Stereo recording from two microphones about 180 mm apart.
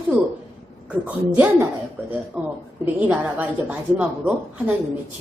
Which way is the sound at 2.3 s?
Centre (ahead or behind).